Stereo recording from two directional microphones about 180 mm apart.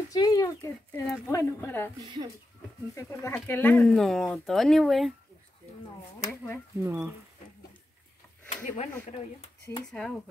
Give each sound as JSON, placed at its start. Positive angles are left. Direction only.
{"t": 0.1, "sound": "speech", "side_deg": 20}
{"t": 2.0, "sound": "speech", "side_deg": -25}
{"t": 2.9, "sound": "speech", "side_deg": 15}
{"t": 6.2, "sound": "speech", "side_deg": 15}
{"t": 6.8, "sound": "speech", "side_deg": -15}
{"t": 9.8, "sound": "speech", "side_deg": 5}